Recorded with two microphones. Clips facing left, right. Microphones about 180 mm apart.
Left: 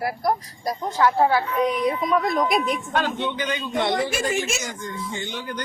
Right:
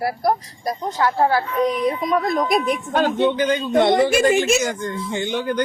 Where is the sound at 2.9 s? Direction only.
45° right (ahead or behind).